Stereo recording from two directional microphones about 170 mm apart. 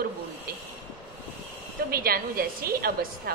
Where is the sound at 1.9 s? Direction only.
60° right (ahead or behind).